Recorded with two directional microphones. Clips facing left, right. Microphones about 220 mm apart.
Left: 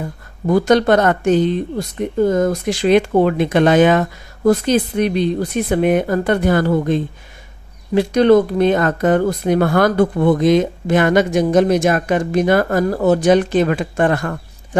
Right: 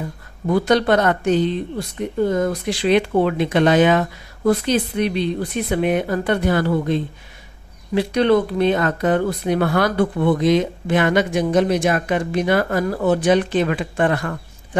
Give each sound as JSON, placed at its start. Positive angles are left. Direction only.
{"t": 0.5, "sound": "speech", "side_deg": 45}